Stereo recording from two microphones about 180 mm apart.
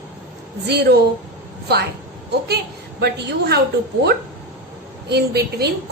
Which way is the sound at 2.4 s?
65° right (ahead or behind).